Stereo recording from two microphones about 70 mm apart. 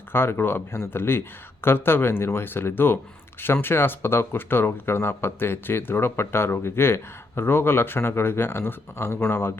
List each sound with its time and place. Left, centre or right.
0.1 s speech: left